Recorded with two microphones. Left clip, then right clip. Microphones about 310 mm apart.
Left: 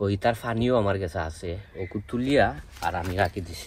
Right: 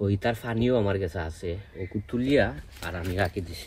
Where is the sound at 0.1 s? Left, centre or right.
Left.